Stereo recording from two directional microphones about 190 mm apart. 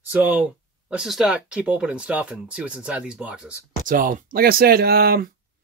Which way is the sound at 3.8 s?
45° right (ahead or behind).